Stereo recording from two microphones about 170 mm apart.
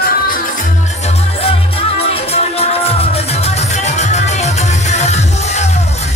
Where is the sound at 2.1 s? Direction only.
35° left (ahead or behind).